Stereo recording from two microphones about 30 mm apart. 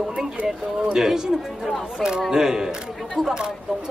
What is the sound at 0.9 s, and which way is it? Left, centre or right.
Speech, centre.